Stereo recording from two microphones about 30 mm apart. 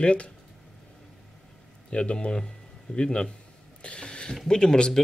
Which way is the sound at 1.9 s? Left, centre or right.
Left.